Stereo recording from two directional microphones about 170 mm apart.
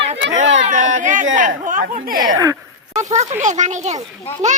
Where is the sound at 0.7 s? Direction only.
45° right (ahead or behind).